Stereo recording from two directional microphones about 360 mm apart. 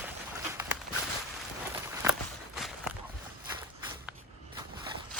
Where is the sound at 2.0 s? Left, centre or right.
Centre.